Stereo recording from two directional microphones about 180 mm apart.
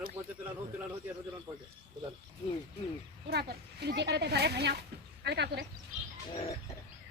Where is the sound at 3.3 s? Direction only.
65° right (ahead or behind).